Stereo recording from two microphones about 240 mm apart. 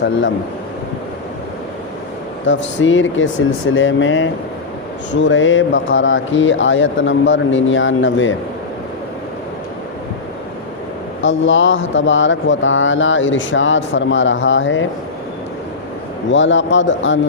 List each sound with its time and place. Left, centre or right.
2.5 s speech: left
11.2 s speech: left
16.3 s speech: left